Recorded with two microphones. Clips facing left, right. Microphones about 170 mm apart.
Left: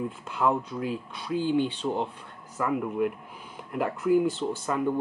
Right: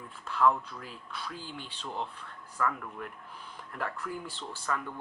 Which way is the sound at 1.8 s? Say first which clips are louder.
Left 9 dB; 35° left (ahead or behind).